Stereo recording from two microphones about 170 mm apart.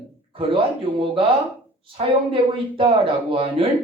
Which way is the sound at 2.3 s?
30° right (ahead or behind).